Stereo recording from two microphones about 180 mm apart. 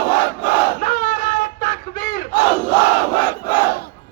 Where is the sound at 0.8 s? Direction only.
45° left (ahead or behind).